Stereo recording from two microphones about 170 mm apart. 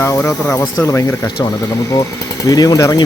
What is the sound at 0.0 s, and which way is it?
Speech, 15° left (ahead or behind).